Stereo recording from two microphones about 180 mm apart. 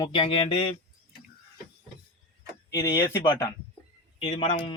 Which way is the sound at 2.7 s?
15° left (ahead or behind).